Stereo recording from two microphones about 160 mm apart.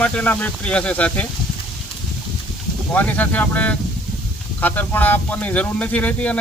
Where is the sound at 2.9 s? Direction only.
10° left (ahead or behind).